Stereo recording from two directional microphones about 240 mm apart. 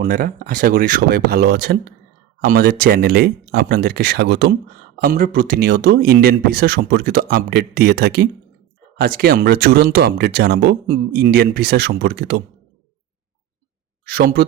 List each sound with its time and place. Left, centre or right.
0.0 s speech: right
14.1 s speech: right